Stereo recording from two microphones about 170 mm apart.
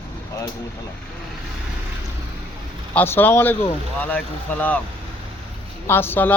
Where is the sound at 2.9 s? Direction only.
10° left (ahead or behind).